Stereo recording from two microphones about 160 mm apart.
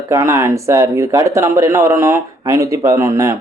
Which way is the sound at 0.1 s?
15° right (ahead or behind).